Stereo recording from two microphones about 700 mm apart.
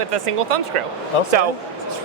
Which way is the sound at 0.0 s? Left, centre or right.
Right.